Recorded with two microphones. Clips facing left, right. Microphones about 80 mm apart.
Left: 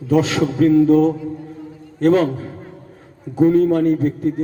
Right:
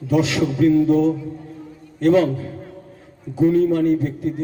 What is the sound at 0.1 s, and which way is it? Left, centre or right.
A man's voice, left.